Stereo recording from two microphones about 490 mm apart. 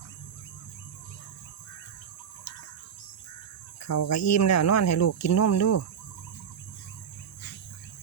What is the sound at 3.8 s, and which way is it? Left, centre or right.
Speech, left.